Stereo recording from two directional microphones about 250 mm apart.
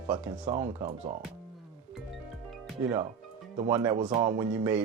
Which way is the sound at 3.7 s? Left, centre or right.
Centre.